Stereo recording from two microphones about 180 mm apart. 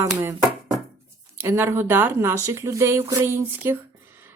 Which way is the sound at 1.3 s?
15° right (ahead or behind).